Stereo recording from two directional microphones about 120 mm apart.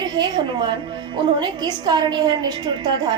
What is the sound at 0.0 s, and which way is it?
A woman's voice, 40° right (ahead or behind).